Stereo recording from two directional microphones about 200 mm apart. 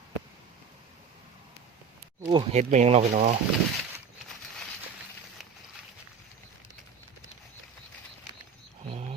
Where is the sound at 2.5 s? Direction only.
35° right (ahead or behind).